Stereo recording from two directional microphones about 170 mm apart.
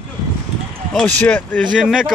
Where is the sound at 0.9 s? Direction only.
10° left (ahead or behind).